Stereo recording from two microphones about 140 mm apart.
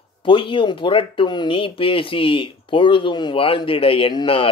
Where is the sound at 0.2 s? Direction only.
35° left (ahead or behind).